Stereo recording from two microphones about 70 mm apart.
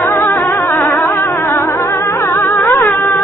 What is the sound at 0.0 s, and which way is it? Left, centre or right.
Music, left.